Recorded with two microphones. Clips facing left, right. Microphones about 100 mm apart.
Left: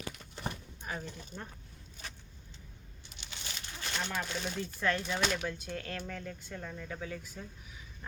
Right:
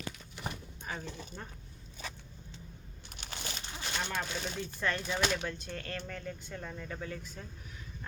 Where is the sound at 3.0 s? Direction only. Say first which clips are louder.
Right 5 dB; 50° right (ahead or behind).